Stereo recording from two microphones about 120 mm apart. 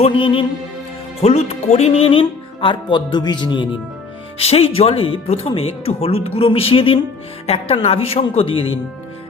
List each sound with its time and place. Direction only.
0.0 s speech: 45° left (ahead or behind)
1.2 s speech: 65° left (ahead or behind); by 3.7 s 40° left (ahead or behind)
4.4 s a woman's voice: 55° left (ahead or behind)